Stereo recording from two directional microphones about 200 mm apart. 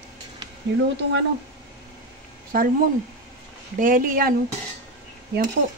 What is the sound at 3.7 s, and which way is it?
Speech, 40° right (ahead or behind).